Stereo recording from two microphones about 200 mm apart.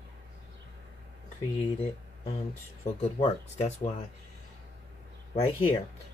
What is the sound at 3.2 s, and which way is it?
Speech, 30° left (ahead or behind).